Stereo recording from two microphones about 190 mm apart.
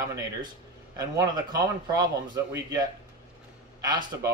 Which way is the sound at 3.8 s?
20° right (ahead or behind).